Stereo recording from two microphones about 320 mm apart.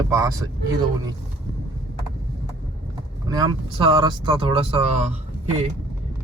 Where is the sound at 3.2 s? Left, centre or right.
Centre.